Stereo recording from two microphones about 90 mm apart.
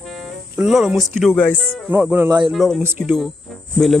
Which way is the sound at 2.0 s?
20° right (ahead or behind).